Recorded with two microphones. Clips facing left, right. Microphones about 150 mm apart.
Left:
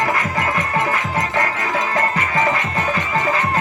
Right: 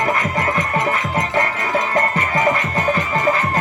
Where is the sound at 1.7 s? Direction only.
35° right (ahead or behind).